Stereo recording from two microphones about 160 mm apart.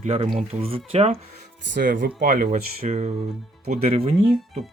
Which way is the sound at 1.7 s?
65° right (ahead or behind).